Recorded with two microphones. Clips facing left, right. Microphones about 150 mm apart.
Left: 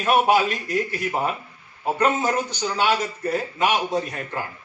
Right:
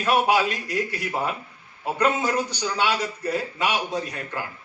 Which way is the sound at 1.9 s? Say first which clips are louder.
Left 1 dB; 30° left (ahead or behind).